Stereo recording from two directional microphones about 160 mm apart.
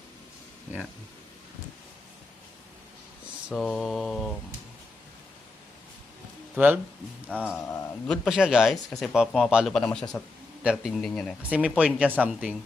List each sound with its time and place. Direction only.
3.5 s speech: centre (ahead or behind)
6.6 s speech: 10° right (ahead or behind)
7.5 s a man's voice: 15° left (ahead or behind)
8.0 s speech: centre (ahead or behind)